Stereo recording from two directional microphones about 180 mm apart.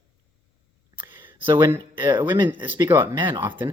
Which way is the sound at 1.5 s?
15° right (ahead or behind).